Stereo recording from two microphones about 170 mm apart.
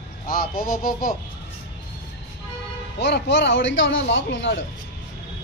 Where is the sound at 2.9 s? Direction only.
85° left.